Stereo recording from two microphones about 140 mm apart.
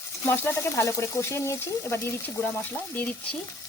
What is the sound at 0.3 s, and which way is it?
Speech, 15° left (ahead or behind).